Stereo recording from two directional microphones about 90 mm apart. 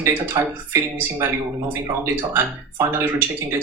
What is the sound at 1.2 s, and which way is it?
Speech, 25° right (ahead or behind).